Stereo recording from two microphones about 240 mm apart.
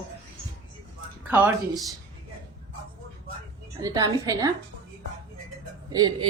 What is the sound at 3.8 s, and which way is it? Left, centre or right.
Speech, centre.